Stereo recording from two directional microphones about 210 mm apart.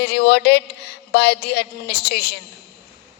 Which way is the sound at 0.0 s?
50° left (ahead or behind).